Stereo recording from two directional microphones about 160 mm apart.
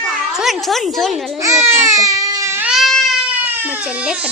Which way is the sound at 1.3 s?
20° right (ahead or behind).